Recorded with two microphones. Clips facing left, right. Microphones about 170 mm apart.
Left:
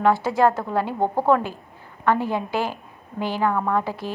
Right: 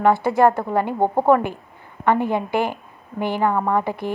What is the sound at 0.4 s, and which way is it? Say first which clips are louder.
A woman's voice: right 2 dB; 15° right (ahead or behind).